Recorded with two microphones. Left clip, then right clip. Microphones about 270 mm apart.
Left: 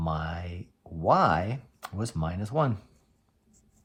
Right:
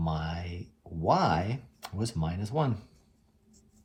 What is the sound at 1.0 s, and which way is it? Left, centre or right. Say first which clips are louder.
Speech: left 3 dB; left.